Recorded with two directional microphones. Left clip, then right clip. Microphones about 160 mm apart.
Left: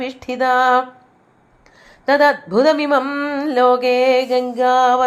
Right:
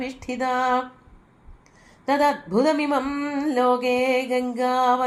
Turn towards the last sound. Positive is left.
turn(degrees=20)  # may be behind; listen again after turning